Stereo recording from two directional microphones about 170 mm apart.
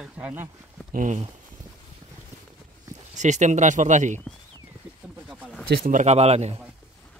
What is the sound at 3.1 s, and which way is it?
Speech, 45° right (ahead or behind).